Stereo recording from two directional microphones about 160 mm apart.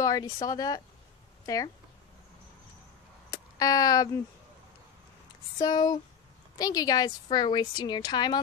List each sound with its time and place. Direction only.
0.0 s a woman's voice: 20° left (ahead or behind)
3.3 s a sound: 25° left (ahead or behind)
5.6 s a woman's voice: 25° left (ahead or behind)